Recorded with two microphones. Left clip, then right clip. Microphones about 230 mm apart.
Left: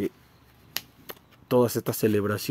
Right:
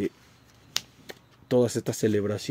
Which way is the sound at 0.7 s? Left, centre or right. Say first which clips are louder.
Right 4 dB; right.